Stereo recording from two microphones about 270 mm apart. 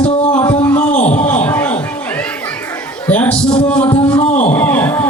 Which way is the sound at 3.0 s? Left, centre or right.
Centre.